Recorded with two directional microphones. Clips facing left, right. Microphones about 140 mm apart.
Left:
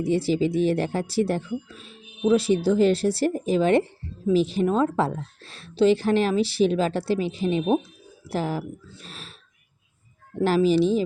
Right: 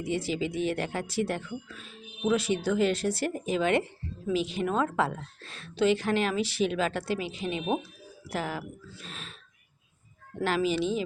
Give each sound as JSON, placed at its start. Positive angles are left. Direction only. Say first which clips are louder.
{"t": 0.0, "sound": "speech", "louder": "left 8 dB", "side_deg": 35}
{"t": 9.0, "sound": "a sound", "louder": "left 1 dB", "side_deg": 35}
{"t": 10.4, "sound": "speech", "louder": "left 8 dB", "side_deg": 35}